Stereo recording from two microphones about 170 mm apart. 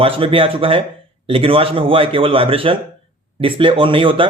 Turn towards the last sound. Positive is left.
turn(degrees=-30)  # may be behind; listen again after turning